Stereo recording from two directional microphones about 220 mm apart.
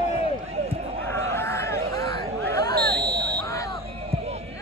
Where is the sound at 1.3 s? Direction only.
10° left (ahead or behind).